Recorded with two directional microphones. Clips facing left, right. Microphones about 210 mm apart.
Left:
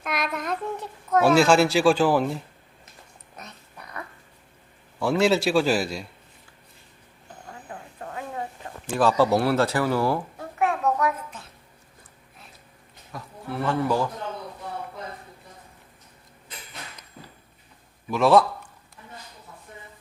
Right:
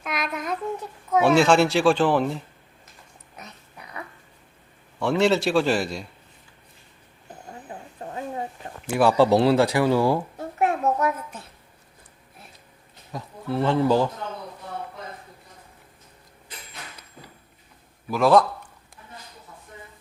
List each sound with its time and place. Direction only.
0.0 s child singing: centre (ahead or behind)
1.2 s speech: 5° left (ahead or behind)
4.9 s speech: 5° left (ahead or behind)
7.7 s a sound: 25° right (ahead or behind)
9.0 s a child's voice: 15° right (ahead or behind)
13.1 s a man's voice: 25° right (ahead or behind)
18.1 s speech: 5° left (ahead or behind)